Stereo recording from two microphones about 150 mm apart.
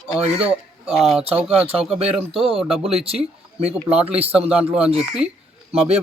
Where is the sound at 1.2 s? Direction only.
40° right (ahead or behind).